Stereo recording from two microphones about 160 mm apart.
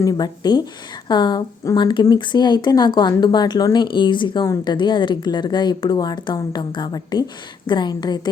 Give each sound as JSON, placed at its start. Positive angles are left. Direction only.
{"t": 0.0, "sound": "speech", "side_deg": 25}